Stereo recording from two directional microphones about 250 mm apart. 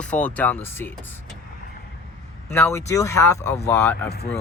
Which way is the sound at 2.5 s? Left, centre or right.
Centre.